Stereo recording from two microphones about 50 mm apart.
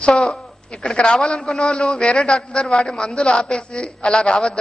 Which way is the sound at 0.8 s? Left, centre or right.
Centre.